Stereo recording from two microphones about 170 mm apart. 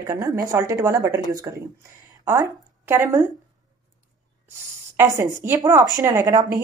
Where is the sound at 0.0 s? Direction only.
20° right (ahead or behind).